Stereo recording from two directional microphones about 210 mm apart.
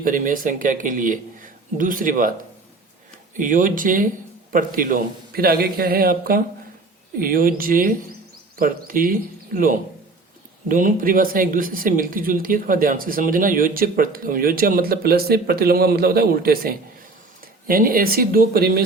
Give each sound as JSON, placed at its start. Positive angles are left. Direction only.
{"t": 0.0, "sound": "speech", "side_deg": -40}
{"t": 3.3, "sound": "speech", "side_deg": -40}